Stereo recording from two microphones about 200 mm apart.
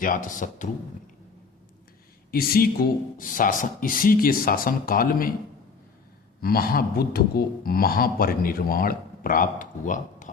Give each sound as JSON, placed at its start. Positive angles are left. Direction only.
{"t": 0.0, "sound": "speech", "side_deg": 40}
{"t": 2.3, "sound": "a man's voice", "side_deg": 50}
{"t": 6.4, "sound": "a man's voice", "side_deg": 50}